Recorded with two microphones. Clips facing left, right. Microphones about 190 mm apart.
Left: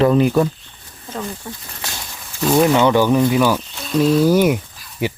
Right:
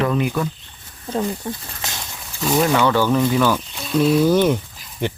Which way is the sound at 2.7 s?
20° left (ahead or behind).